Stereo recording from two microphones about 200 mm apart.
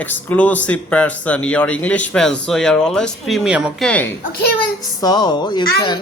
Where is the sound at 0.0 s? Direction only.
10° left (ahead or behind).